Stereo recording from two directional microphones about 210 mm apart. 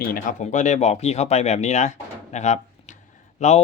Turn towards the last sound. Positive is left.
turn(degrees=30)  # may be behind; listen again after turning